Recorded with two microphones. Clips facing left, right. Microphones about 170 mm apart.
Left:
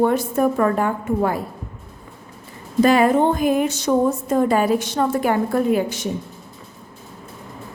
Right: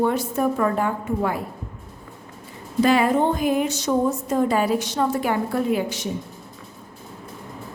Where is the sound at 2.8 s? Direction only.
45° left (ahead or behind).